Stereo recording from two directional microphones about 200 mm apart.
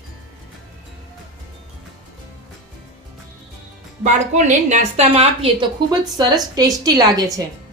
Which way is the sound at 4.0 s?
35° right (ahead or behind).